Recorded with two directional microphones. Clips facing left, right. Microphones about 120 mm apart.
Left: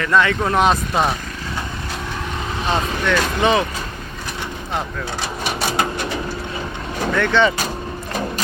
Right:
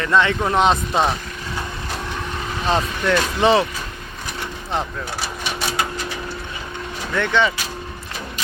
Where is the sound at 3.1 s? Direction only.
30° right (ahead or behind).